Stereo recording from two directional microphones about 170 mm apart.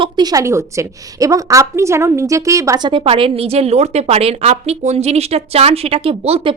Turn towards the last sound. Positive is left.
turn(degrees=-35)  # may be behind; listen again after turning